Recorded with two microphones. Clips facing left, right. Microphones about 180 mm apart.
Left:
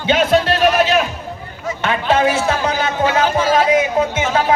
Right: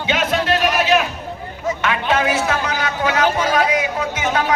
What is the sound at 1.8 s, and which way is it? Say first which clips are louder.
A man's voice: left 5 dB; 30° left (ahead or behind).